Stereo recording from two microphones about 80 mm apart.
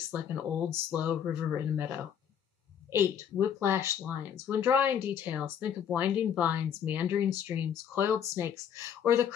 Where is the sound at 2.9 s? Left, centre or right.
Right.